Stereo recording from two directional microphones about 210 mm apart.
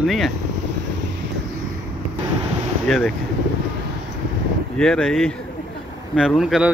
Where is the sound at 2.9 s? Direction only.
Centre (ahead or behind).